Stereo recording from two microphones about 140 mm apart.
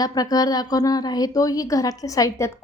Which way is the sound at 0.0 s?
25° left (ahead or behind).